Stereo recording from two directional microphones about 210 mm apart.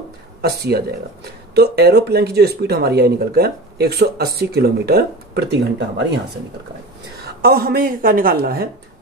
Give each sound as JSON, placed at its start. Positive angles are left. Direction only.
{"t": 0.4, "sound": "speech", "side_deg": -50}
{"t": 7.2, "sound": "speech", "side_deg": -45}